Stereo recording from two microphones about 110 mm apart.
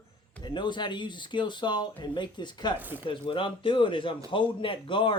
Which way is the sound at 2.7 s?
15° right (ahead or behind).